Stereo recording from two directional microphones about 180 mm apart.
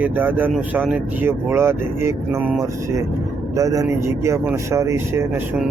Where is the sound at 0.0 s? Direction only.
10° right (ahead or behind).